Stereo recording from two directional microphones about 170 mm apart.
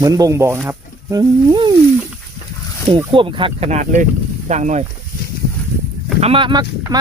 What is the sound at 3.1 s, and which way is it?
Speech, 30° right (ahead or behind).